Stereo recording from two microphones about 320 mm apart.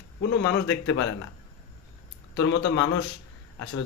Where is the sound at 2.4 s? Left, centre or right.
Left.